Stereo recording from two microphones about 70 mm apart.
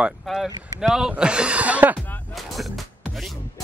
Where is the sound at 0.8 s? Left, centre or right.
Centre; by 2.0 s right.